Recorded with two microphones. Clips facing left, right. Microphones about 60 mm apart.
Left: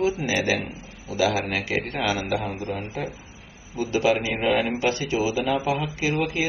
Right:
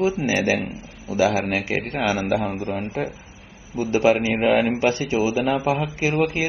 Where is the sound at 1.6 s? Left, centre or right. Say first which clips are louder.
Right 2 dB; right.